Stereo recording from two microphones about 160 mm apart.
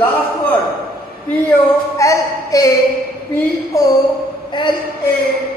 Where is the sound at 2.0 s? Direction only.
20° left (ahead or behind).